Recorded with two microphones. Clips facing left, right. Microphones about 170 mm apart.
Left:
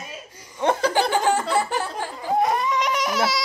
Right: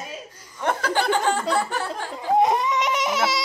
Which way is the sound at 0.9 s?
10° left (ahead or behind).